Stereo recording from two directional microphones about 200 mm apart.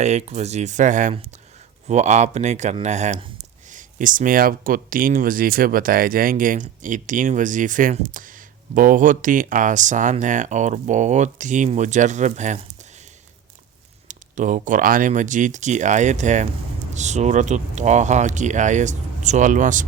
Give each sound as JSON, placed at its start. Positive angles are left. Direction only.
{"t": 0.0, "sound": "speech", "side_deg": -35}
{"t": 14.1, "sound": "speech", "side_deg": -40}